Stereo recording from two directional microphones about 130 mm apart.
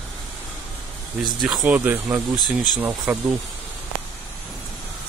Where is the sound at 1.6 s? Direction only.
15° right (ahead or behind).